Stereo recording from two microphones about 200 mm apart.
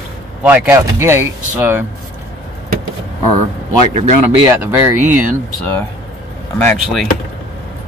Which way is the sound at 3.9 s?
35° right (ahead or behind).